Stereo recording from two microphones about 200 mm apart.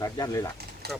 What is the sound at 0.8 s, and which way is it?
Speech, 50° right (ahead or behind).